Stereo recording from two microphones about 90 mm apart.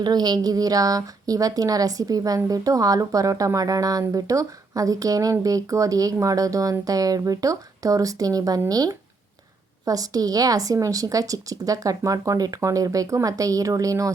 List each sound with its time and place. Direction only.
0.0 s a woman's voice: 50° right (ahead or behind)